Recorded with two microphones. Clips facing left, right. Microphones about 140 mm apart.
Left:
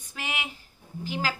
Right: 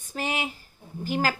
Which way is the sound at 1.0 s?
50° right (ahead or behind).